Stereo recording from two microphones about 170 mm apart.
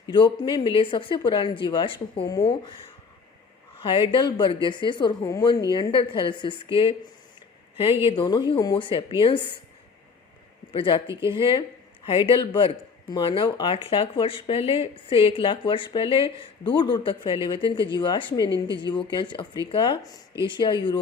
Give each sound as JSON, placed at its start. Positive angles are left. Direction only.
{"t": 0.1, "sound": "speech", "side_deg": 30}
{"t": 3.8, "sound": "speech", "side_deg": 30}
{"t": 8.0, "sound": "speech", "side_deg": 25}
{"t": 10.7, "sound": "speech", "side_deg": 30}